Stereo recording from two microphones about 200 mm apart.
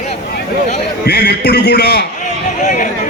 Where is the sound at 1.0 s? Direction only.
50° left (ahead or behind).